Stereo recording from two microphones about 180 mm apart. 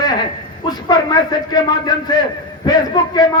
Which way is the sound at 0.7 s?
20° left (ahead or behind).